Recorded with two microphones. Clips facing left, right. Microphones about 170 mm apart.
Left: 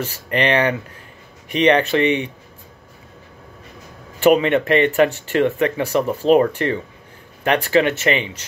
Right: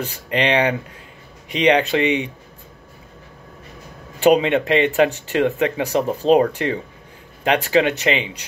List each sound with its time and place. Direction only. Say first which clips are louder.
0.0 s speech: left 1 dB; 15° right (ahead or behind)
4.2 s speech: left 1 dB; 15° right (ahead or behind)